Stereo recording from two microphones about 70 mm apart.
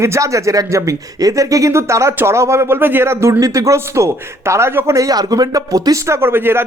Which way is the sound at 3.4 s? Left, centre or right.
Right.